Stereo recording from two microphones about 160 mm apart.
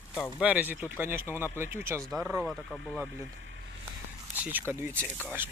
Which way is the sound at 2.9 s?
10° right (ahead or behind).